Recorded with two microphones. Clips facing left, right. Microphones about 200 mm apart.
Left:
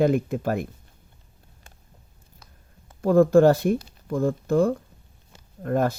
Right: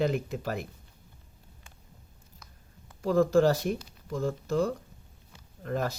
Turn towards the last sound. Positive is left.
turn(degrees=50)  # may be behind; listen again after turning